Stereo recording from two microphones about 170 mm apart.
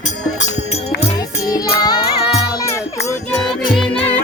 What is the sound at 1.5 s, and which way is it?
Music, 20° left (ahead or behind).